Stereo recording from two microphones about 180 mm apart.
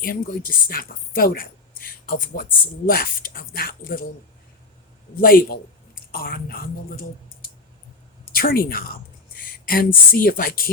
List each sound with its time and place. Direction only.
0.0 s a woman's voice: 55° left (ahead or behind)
5.2 s a woman's voice: 55° left (ahead or behind)
8.3 s speech: 55° left (ahead or behind)